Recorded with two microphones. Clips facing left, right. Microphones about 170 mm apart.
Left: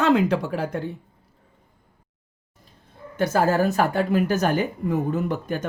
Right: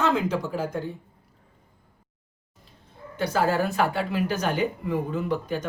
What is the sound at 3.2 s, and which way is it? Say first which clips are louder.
Speech: left 3 dB; 45° left (ahead or behind).